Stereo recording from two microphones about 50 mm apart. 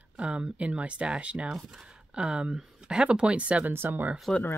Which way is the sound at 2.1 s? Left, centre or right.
Centre.